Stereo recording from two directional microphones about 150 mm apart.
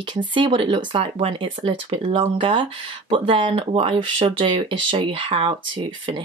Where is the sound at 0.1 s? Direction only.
30° right (ahead or behind).